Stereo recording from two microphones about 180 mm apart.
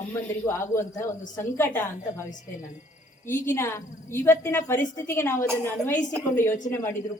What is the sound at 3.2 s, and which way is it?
A woman's voice, 15° left (ahead or behind).